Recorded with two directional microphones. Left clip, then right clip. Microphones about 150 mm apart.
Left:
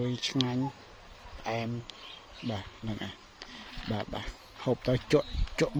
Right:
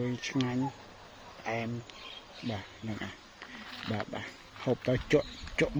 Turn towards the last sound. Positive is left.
turn(degrees=20)  # may be behind; listen again after turning